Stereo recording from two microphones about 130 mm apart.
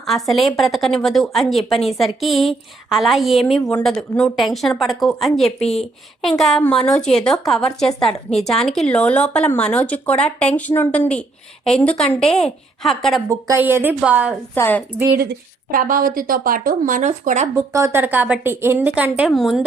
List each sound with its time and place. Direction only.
0.0 s a woman's voice: centre (ahead or behind)
5.6 s a woman's voice: 50° left (ahead or behind)
6.6 s a woman's voice: 5° left (ahead or behind)
13.2 s a woman's voice: 25° right (ahead or behind)
14.5 s speech: 15° left (ahead or behind)
15.7 s speech: 90° right; by 17.5 s 65° right (ahead or behind)
17.7 s a woman's voice: 20° right (ahead or behind); by 19.6 s centre (ahead or behind)